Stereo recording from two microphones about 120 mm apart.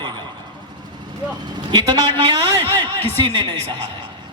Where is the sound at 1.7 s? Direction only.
35° right (ahead or behind).